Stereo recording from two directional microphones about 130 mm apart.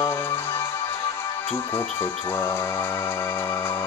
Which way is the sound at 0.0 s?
20° left (ahead or behind).